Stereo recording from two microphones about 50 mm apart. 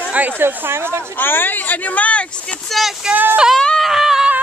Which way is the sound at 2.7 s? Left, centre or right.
Centre.